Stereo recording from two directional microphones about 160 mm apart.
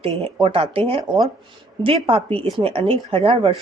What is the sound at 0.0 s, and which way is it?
Speech, 35° right (ahead or behind).